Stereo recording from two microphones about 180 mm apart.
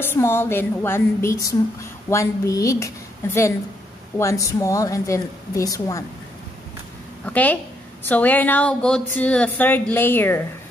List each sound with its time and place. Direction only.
0.0 s speech: 15° left (ahead or behind)
4.2 s speech: 15° left (ahead or behind)
7.2 s speech: 10° left (ahead or behind)